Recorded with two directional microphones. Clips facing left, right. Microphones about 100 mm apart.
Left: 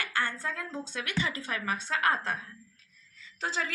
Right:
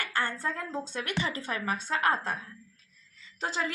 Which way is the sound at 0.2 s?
30° right (ahead or behind).